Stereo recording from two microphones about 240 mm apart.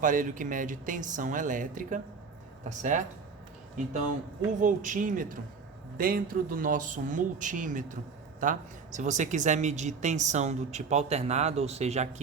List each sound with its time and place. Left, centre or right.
0.0 s speech: right
4.6 s speech: right